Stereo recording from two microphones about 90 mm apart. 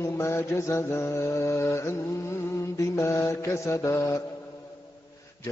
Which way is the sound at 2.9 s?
30° left (ahead or behind).